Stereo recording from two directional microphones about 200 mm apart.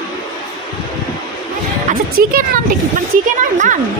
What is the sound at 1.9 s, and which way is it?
Speech, 45° right (ahead or behind).